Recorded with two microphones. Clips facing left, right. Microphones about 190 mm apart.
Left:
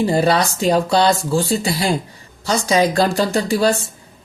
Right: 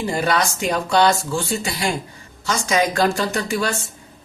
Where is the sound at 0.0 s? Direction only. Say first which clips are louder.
Left 5 dB; 35° left (ahead or behind).